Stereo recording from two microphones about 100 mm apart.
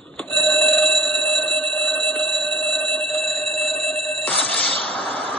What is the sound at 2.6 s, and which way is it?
Music, 15° left (ahead or behind).